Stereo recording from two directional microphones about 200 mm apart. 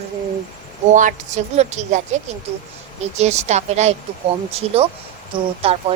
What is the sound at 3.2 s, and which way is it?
Speech, 35° right (ahead or behind).